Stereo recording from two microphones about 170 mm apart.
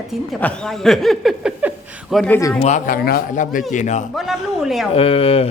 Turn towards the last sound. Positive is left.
turn(degrees=35)  # may be behind; listen again after turning